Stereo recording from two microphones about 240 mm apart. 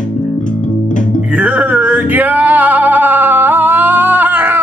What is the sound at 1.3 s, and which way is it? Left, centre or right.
Male singing, centre.